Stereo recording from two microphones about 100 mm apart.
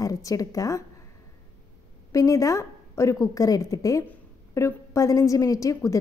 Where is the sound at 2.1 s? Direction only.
35° left (ahead or behind).